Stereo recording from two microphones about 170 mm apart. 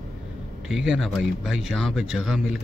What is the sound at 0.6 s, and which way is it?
A man's voice, 5° right (ahead or behind).